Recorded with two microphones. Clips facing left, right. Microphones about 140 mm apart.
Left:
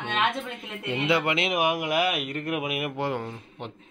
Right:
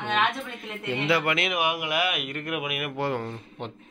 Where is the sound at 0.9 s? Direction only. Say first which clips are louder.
Left 1 dB; 20° left (ahead or behind).